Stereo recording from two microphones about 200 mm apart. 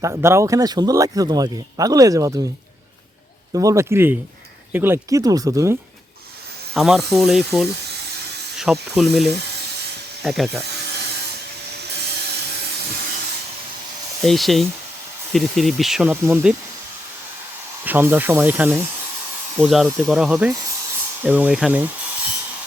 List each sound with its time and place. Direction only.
0.0 s speech: 15° right (ahead or behind)
3.5 s speech: 15° right (ahead or behind)
6.7 s speech: centre (ahead or behind)
8.5 s snake: 5° right (ahead or behind)
9.0 s speech: centre (ahead or behind)
14.2 s speech: centre (ahead or behind)
17.8 s speech: 10° right (ahead or behind)